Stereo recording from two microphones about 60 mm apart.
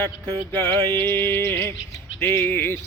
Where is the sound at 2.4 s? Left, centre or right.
Left.